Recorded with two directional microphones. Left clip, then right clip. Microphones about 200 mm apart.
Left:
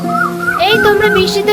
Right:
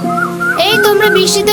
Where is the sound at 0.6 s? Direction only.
60° right (ahead or behind).